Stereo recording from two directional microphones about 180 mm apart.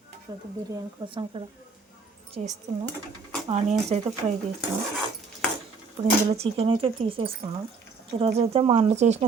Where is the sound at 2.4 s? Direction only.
40° right (ahead or behind).